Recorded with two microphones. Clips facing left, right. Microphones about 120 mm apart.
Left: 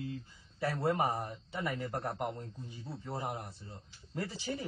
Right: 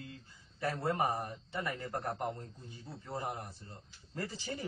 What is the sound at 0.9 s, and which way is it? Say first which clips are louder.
A man's voice: even; 20° left (ahead or behind).